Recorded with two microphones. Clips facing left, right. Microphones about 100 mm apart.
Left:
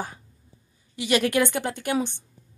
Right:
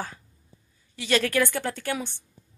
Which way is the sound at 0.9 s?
15° left (ahead or behind).